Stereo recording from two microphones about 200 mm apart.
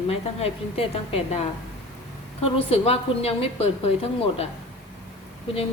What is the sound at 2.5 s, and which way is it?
A woman's voice, 30° left (ahead or behind).